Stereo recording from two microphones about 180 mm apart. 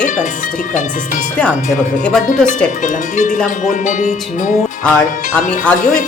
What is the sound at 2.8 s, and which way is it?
Music, 45° left (ahead or behind).